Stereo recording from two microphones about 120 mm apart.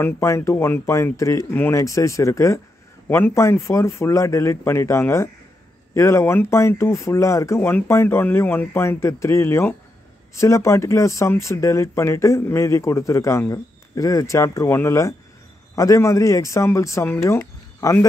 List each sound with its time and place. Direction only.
0.0 s speech: 20° left (ahead or behind)